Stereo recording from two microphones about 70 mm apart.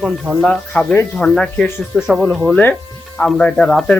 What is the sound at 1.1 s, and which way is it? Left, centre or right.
Speech, centre.